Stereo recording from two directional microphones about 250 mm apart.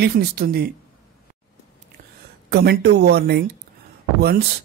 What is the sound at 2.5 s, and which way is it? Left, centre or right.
Speech, right.